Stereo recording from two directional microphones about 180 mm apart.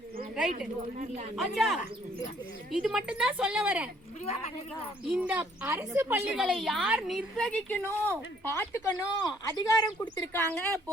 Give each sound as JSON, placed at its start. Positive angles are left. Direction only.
{"t": 0.9, "sound": "speech", "side_deg": -40}
{"t": 1.4, "sound": "a woman's voice", "side_deg": 0}
{"t": 5.0, "sound": "a woman's voice", "side_deg": -5}